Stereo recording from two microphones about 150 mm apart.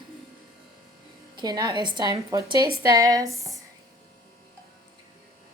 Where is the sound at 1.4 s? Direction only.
25° right (ahead or behind).